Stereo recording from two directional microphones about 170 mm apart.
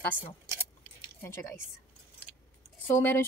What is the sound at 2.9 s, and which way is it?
Speech, 10° left (ahead or behind).